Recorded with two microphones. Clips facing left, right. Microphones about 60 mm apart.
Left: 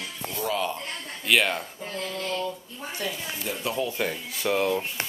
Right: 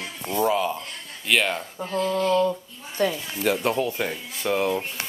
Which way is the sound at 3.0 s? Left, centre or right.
Right.